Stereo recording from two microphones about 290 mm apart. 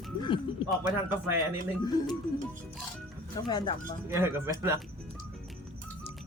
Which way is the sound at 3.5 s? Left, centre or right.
Centre.